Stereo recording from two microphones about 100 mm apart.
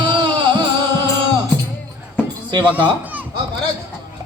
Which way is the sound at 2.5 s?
55° right (ahead or behind).